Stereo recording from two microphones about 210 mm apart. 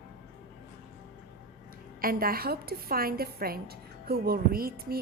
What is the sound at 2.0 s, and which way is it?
A woman's voice, 45° right (ahead or behind).